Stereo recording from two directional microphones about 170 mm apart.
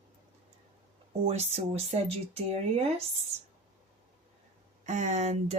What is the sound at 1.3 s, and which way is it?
Speech, 35° right (ahead or behind).